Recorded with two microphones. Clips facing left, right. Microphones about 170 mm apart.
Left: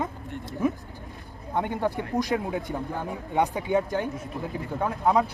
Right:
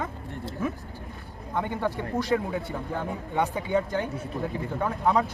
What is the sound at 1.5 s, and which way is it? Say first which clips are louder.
Speech: left 2 dB; 15° left (ahead or behind).